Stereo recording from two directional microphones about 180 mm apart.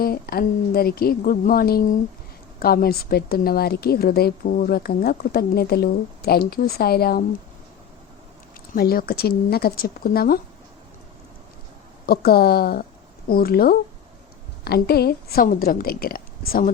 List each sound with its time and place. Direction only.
0.0 s a woman's voice: 55° left (ahead or behind)
8.7 s a woman's voice: 55° left (ahead or behind)
12.0 s a woman's voice: 60° left (ahead or behind)